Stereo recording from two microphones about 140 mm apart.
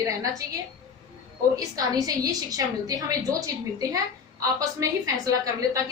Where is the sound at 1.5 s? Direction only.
25° right (ahead or behind).